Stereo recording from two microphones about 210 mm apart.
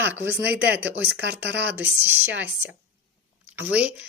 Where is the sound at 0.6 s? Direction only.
55° right (ahead or behind).